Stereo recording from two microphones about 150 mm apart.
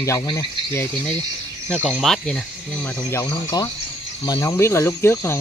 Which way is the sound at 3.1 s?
20° left (ahead or behind).